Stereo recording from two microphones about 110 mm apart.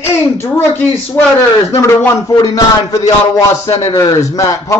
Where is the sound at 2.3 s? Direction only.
35° left (ahead or behind).